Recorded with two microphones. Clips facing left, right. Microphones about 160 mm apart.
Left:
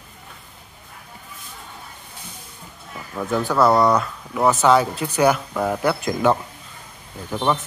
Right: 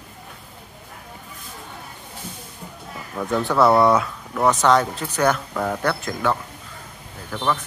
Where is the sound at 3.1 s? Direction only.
Centre (ahead or behind).